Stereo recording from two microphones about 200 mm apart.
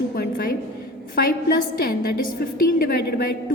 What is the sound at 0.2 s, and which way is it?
A woman's voice, 45° left (ahead or behind).